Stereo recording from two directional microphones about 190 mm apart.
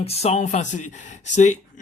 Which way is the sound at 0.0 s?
35° left (ahead or behind).